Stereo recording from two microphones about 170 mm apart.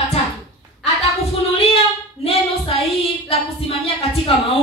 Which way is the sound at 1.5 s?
35° left (ahead or behind).